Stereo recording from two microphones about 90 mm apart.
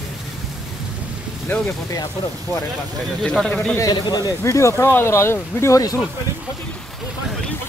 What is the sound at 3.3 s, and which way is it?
Speech, 10° left (ahead or behind).